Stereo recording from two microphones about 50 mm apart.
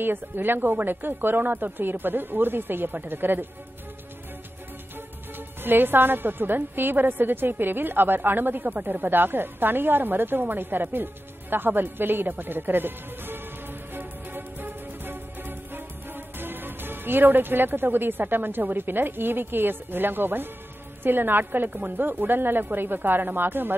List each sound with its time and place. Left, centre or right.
0.0 s a woman's voice: right
5.6 s a woman's voice: right
13.9 s music: right
21.0 s a woman's voice: right